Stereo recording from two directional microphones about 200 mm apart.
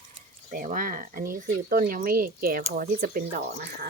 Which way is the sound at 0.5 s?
45° right (ahead or behind).